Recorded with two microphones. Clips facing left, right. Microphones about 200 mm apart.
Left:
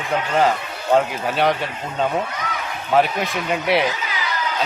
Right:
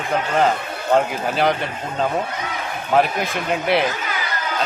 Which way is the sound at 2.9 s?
Centre (ahead or behind).